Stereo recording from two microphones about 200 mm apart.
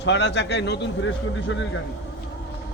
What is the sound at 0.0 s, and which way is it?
Speech, 60° left (ahead or behind).